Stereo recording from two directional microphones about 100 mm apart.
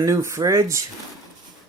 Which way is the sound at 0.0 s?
30° right (ahead or behind).